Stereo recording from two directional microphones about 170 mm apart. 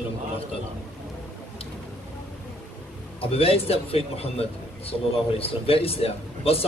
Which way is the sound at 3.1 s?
35° left (ahead or behind).